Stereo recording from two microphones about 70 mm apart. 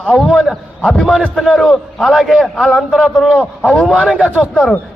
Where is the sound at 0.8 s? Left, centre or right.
Centre.